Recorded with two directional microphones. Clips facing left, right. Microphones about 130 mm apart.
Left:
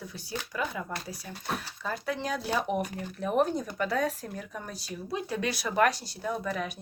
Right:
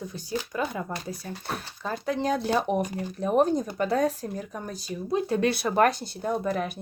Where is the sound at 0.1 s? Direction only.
45° right (ahead or behind).